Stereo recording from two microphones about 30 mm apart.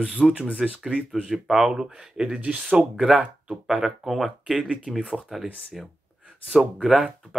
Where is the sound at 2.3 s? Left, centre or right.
Right.